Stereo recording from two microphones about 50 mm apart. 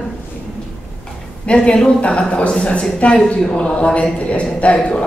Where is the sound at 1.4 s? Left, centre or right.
Left.